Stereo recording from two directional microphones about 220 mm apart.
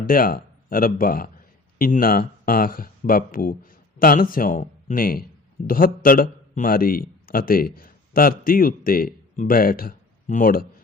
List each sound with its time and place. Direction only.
0.0 s a man's voice: 40° left (ahead or behind)